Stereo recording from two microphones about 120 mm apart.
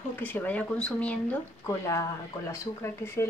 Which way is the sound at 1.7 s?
25° left (ahead or behind).